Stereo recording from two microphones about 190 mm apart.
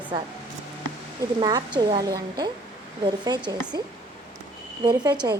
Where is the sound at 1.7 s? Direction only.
20° right (ahead or behind).